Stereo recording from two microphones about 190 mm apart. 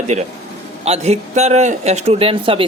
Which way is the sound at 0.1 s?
40° right (ahead or behind).